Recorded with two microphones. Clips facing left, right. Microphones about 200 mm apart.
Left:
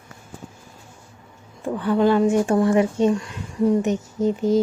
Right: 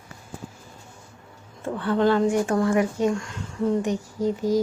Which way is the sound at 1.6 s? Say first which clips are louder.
Left 3 dB; 15° left (ahead or behind).